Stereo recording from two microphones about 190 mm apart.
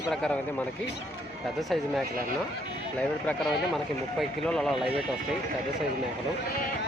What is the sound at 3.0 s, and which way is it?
A man's voice, 5° left (ahead or behind).